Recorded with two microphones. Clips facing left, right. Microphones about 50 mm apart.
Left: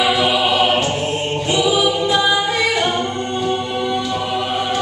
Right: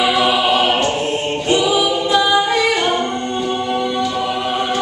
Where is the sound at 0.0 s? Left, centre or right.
Centre.